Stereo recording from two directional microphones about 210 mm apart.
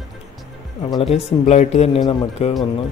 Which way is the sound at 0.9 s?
30° left (ahead or behind).